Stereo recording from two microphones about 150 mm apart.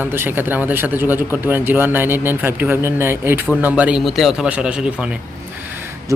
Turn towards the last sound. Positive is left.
turn(degrees=-10)  # may be behind; listen again after turning